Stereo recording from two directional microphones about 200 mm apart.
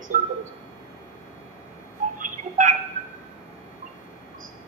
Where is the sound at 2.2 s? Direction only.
40° right (ahead or behind).